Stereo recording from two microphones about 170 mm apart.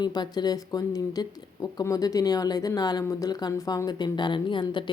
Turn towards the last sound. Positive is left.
turn(degrees=30)  # may be behind; listen again after turning